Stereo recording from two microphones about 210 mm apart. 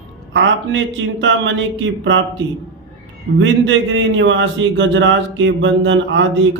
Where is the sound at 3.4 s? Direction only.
65° right (ahead or behind).